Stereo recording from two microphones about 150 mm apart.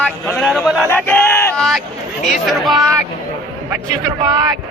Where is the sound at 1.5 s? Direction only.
Centre (ahead or behind).